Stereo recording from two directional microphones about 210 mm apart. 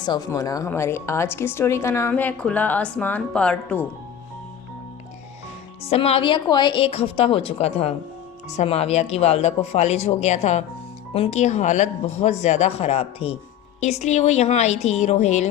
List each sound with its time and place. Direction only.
0.0 s a woman's voice: 20° left (ahead or behind)
5.8 s a woman's voice: 30° left (ahead or behind)